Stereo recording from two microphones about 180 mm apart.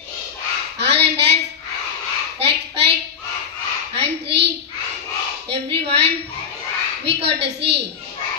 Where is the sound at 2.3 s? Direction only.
70° right (ahead or behind).